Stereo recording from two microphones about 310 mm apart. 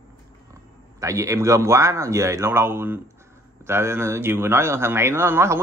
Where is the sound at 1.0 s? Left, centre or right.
Centre.